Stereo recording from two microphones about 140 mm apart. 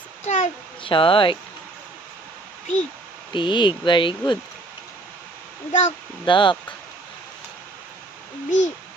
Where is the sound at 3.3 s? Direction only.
35° left (ahead or behind).